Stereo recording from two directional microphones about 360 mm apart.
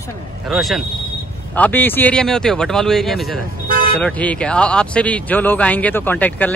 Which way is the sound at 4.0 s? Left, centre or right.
Centre.